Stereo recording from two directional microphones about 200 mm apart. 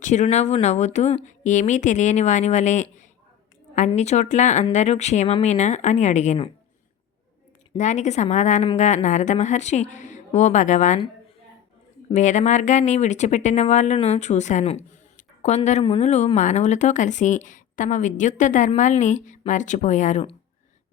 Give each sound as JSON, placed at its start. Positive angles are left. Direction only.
{"t": 0.0, "sound": "speech", "side_deg": 35}
{"t": 7.8, "sound": "speech", "side_deg": 35}
{"t": 12.1, "sound": "speech", "side_deg": 35}